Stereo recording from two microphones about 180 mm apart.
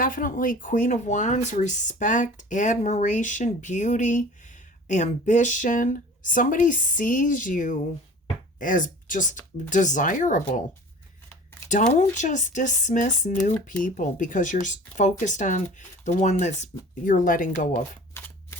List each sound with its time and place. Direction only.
0.0 s speech: 50° left (ahead or behind)
11.7 s speech: 45° left (ahead or behind)
18.2 s a sound: 15° left (ahead or behind)